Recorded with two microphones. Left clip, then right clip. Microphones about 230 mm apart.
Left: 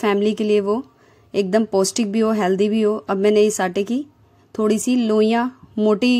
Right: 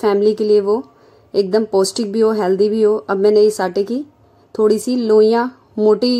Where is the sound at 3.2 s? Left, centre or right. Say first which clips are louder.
Right 3 dB; left.